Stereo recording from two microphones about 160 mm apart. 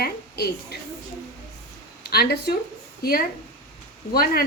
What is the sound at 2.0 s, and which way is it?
Speech, 80° left.